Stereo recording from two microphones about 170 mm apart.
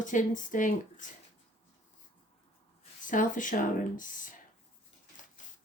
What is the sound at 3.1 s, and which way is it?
Speech, 50° left (ahead or behind).